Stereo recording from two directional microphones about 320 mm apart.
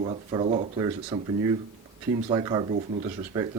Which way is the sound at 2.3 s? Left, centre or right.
Centre.